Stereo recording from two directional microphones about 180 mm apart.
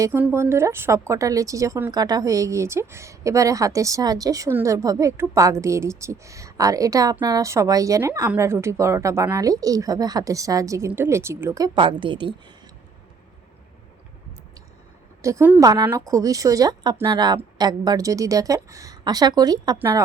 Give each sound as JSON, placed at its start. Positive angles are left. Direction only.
{"t": 0.0, "sound": "a woman's voice", "side_deg": -10}
{"t": 15.2, "sound": "a woman's voice", "side_deg": -15}